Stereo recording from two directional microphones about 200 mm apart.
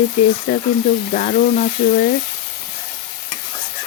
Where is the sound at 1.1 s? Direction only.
45° left (ahead or behind).